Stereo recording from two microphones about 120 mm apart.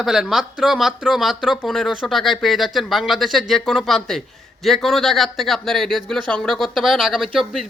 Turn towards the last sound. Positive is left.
turn(degrees=0)  # may be behind; listen again after turning